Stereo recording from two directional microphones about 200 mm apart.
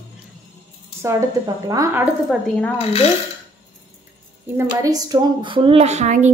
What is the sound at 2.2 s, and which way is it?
Speech, centre (ahead or behind).